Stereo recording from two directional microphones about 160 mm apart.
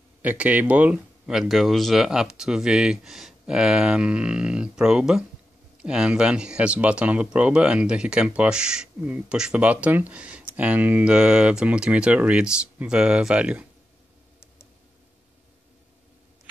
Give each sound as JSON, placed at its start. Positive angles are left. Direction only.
{"t": 0.2, "sound": "speech", "side_deg": -10}